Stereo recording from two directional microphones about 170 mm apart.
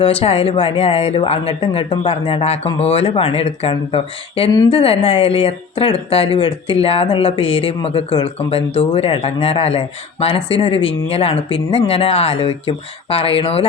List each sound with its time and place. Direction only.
0.0 s speech: 35° left (ahead or behind)